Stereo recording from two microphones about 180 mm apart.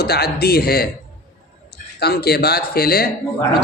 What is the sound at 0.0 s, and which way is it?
Speech, 60° left (ahead or behind).